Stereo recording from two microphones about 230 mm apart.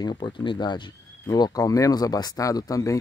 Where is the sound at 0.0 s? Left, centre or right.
Centre.